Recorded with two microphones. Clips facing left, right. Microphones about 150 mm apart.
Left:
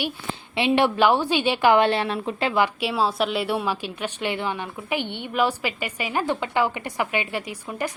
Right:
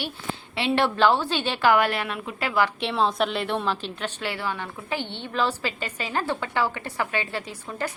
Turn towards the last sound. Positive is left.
turn(degrees=15)  # may be behind; listen again after turning